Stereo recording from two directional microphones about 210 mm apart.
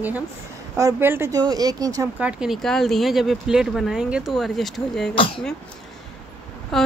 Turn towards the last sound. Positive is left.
turn(degrees=0)  # may be behind; listen again after turning